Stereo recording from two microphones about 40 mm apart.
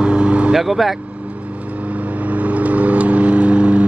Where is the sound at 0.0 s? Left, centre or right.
Right.